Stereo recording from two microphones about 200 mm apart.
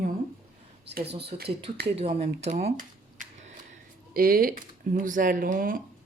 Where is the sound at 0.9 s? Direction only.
55° right (ahead or behind).